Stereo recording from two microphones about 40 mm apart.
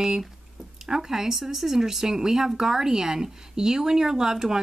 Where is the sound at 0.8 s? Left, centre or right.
Centre.